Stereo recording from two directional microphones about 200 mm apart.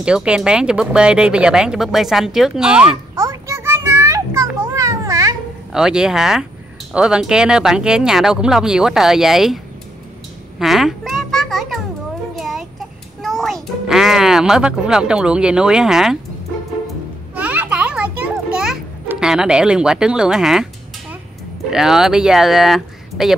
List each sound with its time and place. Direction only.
0.0 s speech: 5° right (ahead or behind)
3.2 s children playing: 15° right (ahead or behind)
4.7 s a sound: 15° right (ahead or behind)
5.7 s speech: 5° right (ahead or behind)
10.6 s a sound: centre (ahead or behind)
13.2 s a child's voice: centre (ahead or behind)
17.4 s music: 5° right (ahead or behind)
21.6 s speech: centre (ahead or behind)